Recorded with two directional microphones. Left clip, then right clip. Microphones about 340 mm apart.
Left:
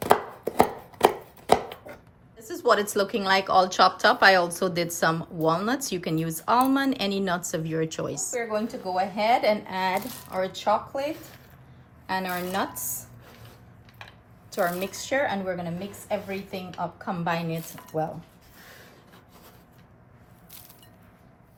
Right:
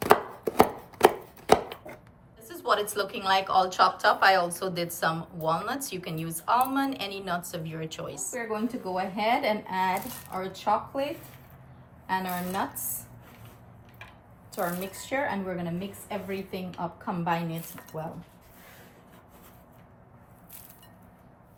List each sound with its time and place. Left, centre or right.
0.0 s chopping: centre
2.4 s a woman's voice: centre
8.4 s a woman's voice: left
12.0 s speech: left
14.5 s speech: left